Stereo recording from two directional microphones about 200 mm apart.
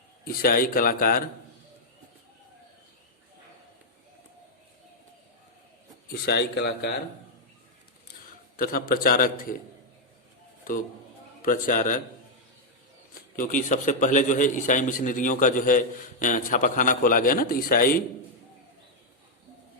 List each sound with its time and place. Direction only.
0.3 s a man's voice: 50° left (ahead or behind)
6.2 s speech: 55° left (ahead or behind)
8.5 s a man's voice: 45° left (ahead or behind)
10.6 s a sound: 40° left (ahead or behind)
11.4 s a man's voice: 40° left (ahead or behind)
13.3 s a man's voice: 40° left (ahead or behind)